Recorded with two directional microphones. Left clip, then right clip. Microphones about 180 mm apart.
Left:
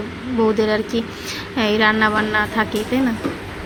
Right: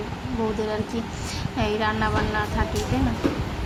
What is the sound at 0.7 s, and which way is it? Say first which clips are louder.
A woman's voice: left 8 dB; 20° left (ahead or behind).